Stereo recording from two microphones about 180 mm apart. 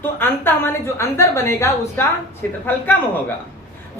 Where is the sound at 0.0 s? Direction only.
10° left (ahead or behind).